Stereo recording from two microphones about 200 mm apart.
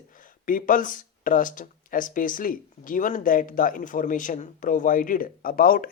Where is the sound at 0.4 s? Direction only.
45° left (ahead or behind).